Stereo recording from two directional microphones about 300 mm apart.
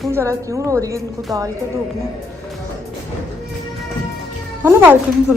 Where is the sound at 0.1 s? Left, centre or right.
Centre.